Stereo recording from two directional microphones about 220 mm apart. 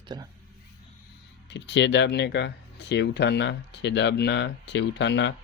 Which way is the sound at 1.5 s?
55° left (ahead or behind).